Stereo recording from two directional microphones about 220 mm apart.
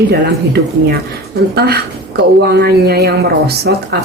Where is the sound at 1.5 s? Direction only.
45° right (ahead or behind).